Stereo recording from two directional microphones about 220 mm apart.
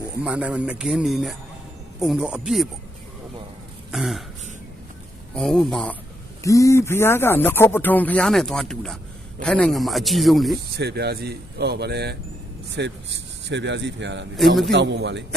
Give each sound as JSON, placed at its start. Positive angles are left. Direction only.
{"t": 0.1, "sound": "a man's voice", "side_deg": -5}
{"t": 3.9, "sound": "throat clearing", "side_deg": 0}
{"t": 5.3, "sound": "a man's voice", "side_deg": 0}
{"t": 6.4, "sound": "a man's voice", "side_deg": 15}
{"t": 10.8, "sound": "speech", "side_deg": -50}
{"t": 14.3, "sound": "a man's voice", "side_deg": 0}
{"t": 14.7, "sound": "speech", "side_deg": -55}